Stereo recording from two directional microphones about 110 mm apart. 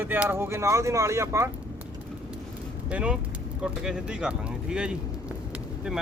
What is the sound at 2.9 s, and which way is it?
Speech, 10° right (ahead or behind).